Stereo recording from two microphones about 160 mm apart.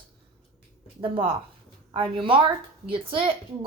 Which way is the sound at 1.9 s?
30° right (ahead or behind).